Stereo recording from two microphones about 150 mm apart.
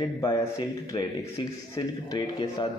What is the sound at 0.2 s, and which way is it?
A man's voice, 25° left (ahead or behind).